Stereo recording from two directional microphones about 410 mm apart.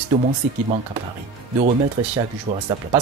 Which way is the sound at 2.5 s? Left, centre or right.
Centre.